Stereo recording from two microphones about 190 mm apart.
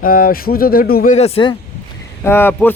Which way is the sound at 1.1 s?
35° left (ahead or behind).